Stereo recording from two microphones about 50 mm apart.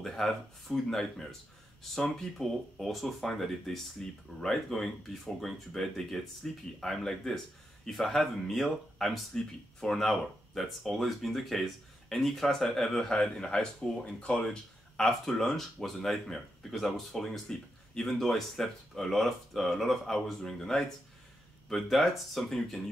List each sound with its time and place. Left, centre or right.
0.0 s speech: centre